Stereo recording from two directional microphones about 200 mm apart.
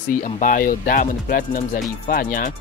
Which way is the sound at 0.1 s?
40° left (ahead or behind).